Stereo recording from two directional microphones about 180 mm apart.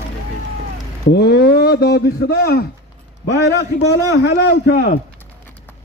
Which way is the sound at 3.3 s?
75° left (ahead or behind).